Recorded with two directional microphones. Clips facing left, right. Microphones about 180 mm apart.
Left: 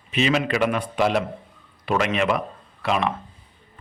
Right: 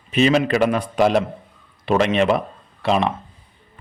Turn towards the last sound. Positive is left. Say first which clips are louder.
# right 4 dB
turn(degrees=-30)  # may be behind; listen again after turning